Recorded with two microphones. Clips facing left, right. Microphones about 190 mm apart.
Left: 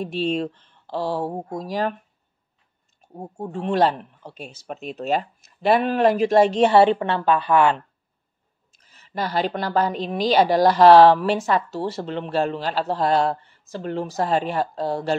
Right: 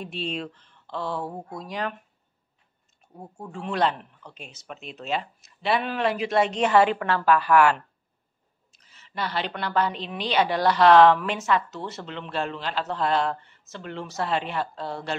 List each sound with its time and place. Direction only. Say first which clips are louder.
0.0 s a woman's voice: left 8 dB; 40° left (ahead or behind)
3.1 s a woman's voice: left 8 dB; 35° left (ahead or behind)
8.8 s a woman's voice: left 4 dB; 40° left (ahead or behind)